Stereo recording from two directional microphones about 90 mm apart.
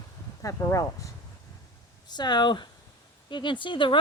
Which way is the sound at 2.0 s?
55° left (ahead or behind).